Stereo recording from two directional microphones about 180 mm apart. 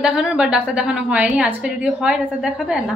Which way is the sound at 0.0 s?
5° right (ahead or behind).